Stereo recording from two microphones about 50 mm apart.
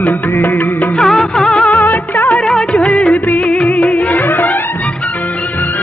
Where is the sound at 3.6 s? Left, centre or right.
Left.